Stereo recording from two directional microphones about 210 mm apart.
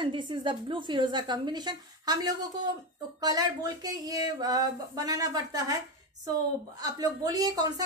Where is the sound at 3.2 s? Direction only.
15° right (ahead or behind).